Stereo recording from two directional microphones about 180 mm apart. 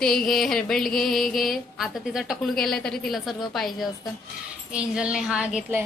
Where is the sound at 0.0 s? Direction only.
Centre (ahead or behind).